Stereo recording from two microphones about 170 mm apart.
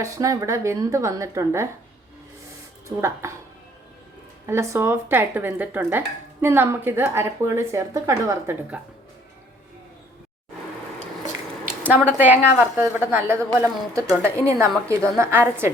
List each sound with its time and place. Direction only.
0.0 s a woman's voice: 20° right (ahead or behind)
2.8 s a woman's voice: 15° right (ahead or behind)
4.4 s a woman's voice: 15° right (ahead or behind)
12.0 s a woman's voice: 10° right (ahead or behind)